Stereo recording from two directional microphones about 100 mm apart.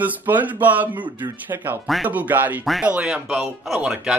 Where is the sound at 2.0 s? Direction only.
15° right (ahead or behind).